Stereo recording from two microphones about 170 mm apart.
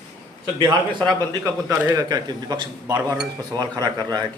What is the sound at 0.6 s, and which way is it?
A man's voice, 25° right (ahead or behind).